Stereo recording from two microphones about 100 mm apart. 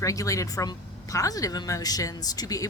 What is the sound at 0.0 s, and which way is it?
A woman's voice, 35° left (ahead or behind).